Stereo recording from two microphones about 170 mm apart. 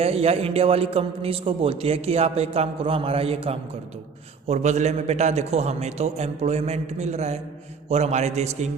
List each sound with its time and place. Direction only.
0.0 s a man's voice: 35° right (ahead or behind)